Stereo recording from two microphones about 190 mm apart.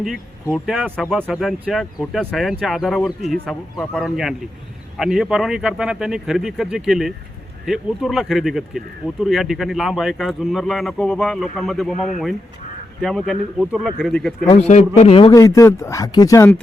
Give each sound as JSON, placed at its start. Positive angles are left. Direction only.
{"t": 0.5, "sound": "speech", "side_deg": 0}
{"t": 13.0, "sound": "speech", "side_deg": 0}
{"t": 14.3, "sound": "a man's voice", "side_deg": 35}
{"t": 15.4, "sound": "speech", "side_deg": 15}